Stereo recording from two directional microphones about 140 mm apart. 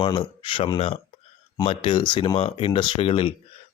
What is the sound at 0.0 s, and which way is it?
Speech, 35° left (ahead or behind).